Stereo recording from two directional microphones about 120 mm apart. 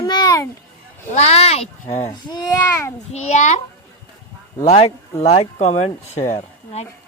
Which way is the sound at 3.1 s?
70° left (ahead or behind).